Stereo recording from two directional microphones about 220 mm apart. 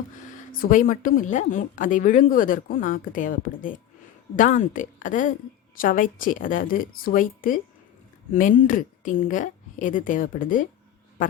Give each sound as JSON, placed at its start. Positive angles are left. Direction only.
{"t": 0.3, "sound": "speech", "side_deg": 40}